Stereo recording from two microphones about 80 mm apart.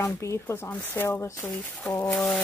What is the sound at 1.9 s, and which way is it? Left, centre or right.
Speech, left.